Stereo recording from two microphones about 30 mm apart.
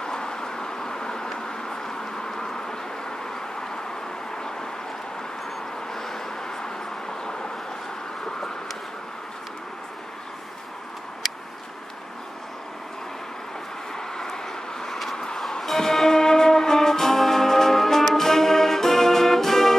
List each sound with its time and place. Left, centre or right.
0.0 s vehicle: left
1.4 s a sound: left
5.9 s vehicle: centre
13.9 s vehicle: centre
15.1 s music: left
15.6 s music: centre